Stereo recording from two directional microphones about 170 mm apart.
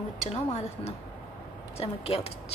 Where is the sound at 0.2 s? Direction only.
40° left (ahead or behind).